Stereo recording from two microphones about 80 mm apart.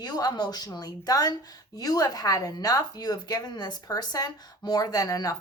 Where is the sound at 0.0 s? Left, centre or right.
Left.